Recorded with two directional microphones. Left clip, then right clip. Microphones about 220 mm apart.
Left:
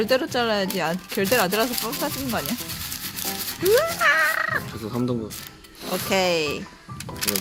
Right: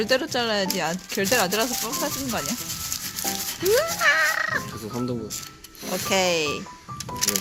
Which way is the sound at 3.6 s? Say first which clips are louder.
Left 2 dB; centre (ahead or behind).